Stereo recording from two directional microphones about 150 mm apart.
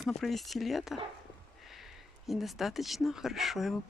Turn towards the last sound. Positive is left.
turn(degrees=0)  # may be behind; listen again after turning